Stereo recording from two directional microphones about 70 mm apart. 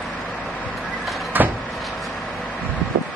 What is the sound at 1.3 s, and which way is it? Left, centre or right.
Vehicle, right.